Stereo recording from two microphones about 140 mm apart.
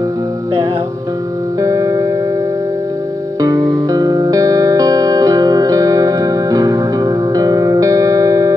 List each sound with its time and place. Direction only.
1.6 s music: 25° right (ahead or behind)
3.3 s music: 25° right (ahead or behind)